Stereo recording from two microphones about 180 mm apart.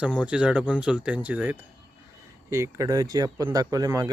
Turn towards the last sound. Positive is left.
turn(degrees=-20)  # may be behind; listen again after turning